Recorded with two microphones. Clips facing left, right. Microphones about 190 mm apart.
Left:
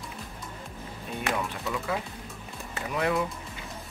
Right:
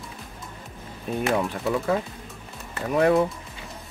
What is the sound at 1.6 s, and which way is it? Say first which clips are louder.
Speech: right 7 dB; 40° right (ahead or behind).